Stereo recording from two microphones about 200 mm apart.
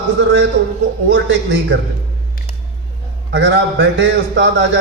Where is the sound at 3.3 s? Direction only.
60° right (ahead or behind).